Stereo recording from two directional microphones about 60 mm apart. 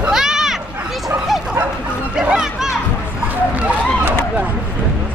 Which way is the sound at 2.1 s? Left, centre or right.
Centre.